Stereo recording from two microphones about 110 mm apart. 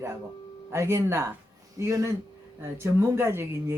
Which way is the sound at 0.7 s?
25° right (ahead or behind).